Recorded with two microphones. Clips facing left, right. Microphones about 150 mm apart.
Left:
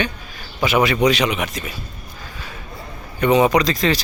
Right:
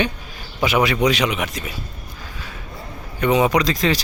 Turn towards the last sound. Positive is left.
turn(degrees=-10)  # may be behind; listen again after turning